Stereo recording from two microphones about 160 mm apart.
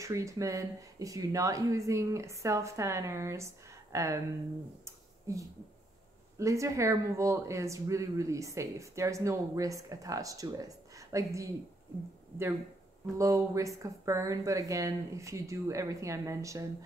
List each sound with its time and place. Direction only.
0.0 s speech: 20° right (ahead or behind)
4.8 s a sound: 20° right (ahead or behind)
6.3 s speech: 20° right (ahead or behind)
13.2 s speech: 20° right (ahead or behind)